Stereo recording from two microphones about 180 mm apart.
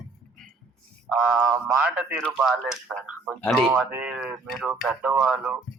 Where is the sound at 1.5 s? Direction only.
10° right (ahead or behind).